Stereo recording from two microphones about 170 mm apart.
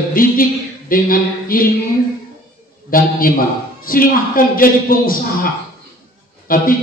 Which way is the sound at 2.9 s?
55° left (ahead or behind).